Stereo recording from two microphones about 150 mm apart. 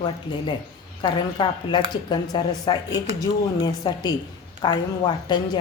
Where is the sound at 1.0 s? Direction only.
30° left (ahead or behind).